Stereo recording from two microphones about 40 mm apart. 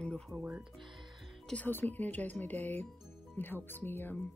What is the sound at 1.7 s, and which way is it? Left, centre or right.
Speech, left.